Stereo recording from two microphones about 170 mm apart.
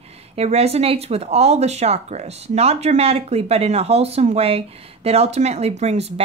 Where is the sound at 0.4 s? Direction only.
40° right (ahead or behind).